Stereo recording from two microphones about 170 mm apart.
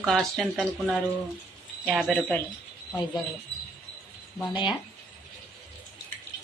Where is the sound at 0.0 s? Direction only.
Centre (ahead or behind).